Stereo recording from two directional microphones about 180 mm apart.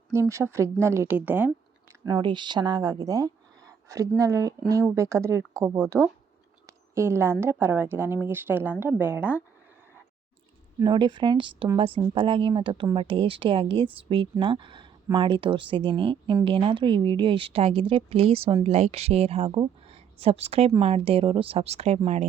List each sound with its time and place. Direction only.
0.1 s a woman's voice: 15° right (ahead or behind)
2.0 s a woman's voice: 25° right (ahead or behind)
10.8 s a woman's voice: 25° right (ahead or behind)